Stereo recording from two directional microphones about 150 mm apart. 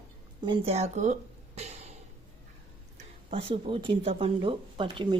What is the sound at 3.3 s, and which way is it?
Speech, 40° right (ahead or behind).